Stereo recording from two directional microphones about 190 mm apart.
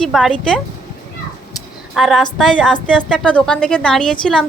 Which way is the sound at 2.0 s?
Centre (ahead or behind).